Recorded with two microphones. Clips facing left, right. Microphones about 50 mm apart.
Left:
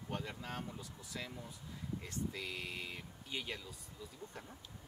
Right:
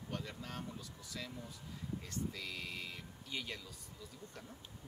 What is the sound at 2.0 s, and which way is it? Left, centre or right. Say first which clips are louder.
Speech: left 2 dB; left.